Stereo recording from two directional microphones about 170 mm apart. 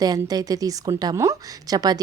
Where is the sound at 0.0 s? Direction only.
20° right (ahead or behind).